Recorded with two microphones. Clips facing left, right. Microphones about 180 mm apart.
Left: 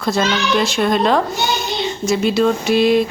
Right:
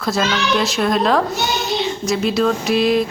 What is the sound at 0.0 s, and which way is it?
Speech, centre (ahead or behind).